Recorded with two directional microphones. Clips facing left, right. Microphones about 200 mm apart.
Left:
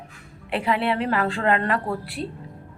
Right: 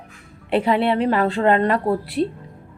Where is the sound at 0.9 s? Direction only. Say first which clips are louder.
Right 5 dB; 35° right (ahead or behind).